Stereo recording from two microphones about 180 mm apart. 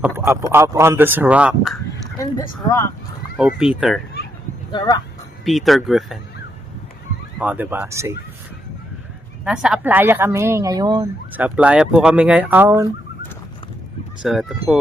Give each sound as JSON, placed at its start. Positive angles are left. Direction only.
{"t": 0.3, "sound": "speech", "side_deg": -15}
{"t": 2.6, "sound": "speech", "side_deg": 15}
{"t": 3.3, "sound": "speech", "side_deg": -5}
{"t": 4.7, "sound": "speech", "side_deg": 25}
{"t": 5.5, "sound": "speech", "side_deg": 0}
{"t": 7.3, "sound": "speech", "side_deg": -10}
{"t": 9.4, "sound": "speech", "side_deg": -5}
{"t": 11.3, "sound": "speech", "side_deg": -10}
{"t": 14.2, "sound": "speech", "side_deg": 0}